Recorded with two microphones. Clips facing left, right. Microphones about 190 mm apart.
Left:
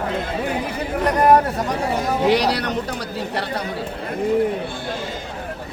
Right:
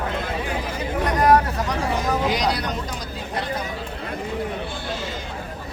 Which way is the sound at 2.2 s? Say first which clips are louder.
Left 5 dB; 65° left (ahead or behind).